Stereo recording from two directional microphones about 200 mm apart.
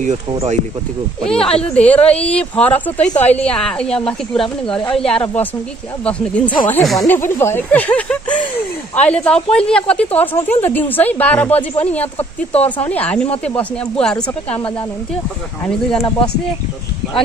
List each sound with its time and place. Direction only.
0.3 s speech: 30° right (ahead or behind)
1.2 s a woman's voice: 5° left (ahead or behind)
7.2 s a woman's voice: 10° left (ahead or behind)
15.6 s a woman's voice: 10° left (ahead or behind)